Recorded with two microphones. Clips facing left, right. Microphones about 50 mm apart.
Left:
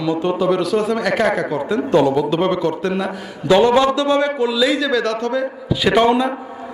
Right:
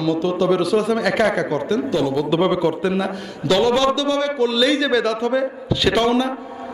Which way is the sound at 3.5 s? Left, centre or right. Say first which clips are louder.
Left 4 dB; left.